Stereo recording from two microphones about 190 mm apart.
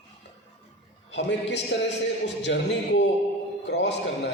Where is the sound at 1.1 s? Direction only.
65° left (ahead or behind).